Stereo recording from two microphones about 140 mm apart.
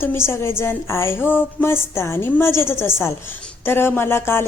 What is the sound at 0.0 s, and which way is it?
A woman's voice, 15° left (ahead or behind).